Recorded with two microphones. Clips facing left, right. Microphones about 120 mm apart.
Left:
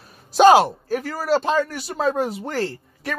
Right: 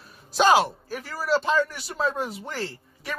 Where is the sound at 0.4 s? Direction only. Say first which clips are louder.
Left 7 dB; 50° left (ahead or behind).